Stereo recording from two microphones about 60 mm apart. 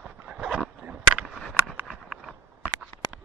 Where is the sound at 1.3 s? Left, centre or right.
Centre.